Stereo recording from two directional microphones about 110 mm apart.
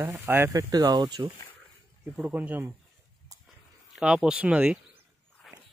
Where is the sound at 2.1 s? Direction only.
15° right (ahead or behind).